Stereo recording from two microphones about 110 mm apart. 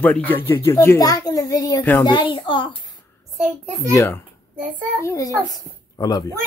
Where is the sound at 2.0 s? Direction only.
45° left (ahead or behind).